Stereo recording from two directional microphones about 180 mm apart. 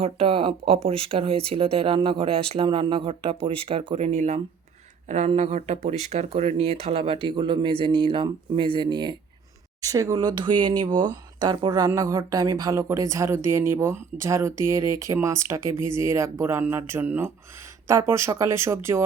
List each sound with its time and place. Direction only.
0.0 s speech: 30° right (ahead or behind); by 19.0 s 15° right (ahead or behind)